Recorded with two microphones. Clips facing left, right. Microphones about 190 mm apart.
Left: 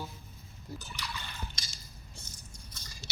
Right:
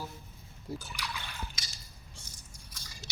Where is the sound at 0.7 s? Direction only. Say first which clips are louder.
Right 5 dB; 30° right (ahead or behind).